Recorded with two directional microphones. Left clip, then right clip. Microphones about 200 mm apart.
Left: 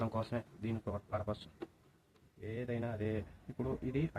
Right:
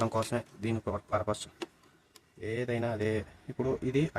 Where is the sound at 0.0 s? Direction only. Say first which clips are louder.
Right 8 dB; 55° right (ahead or behind).